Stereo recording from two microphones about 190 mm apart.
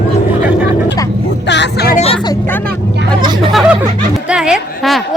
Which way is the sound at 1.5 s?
60° left (ahead or behind).